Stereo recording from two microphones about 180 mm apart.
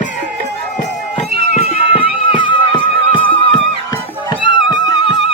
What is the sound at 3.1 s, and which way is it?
Music, 30° left (ahead or behind).